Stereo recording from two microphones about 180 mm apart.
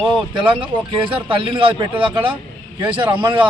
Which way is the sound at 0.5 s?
30° right (ahead or behind).